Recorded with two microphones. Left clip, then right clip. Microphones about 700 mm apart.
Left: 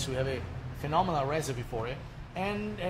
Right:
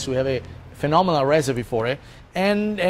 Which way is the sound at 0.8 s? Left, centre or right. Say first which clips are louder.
Right 11 dB; right.